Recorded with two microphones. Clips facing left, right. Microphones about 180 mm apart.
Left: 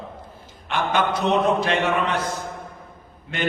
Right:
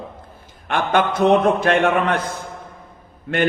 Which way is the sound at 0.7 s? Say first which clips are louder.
Right 3 dB; 55° right (ahead or behind).